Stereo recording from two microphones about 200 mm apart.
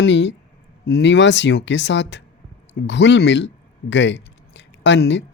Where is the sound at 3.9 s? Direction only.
65° left (ahead or behind).